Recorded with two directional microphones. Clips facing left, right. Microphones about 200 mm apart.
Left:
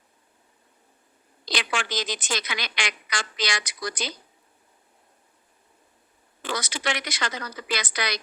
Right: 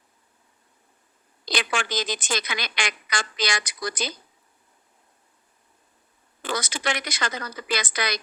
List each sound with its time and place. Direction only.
1.5 s speech: 50° right (ahead or behind)
6.4 s speech: 50° right (ahead or behind)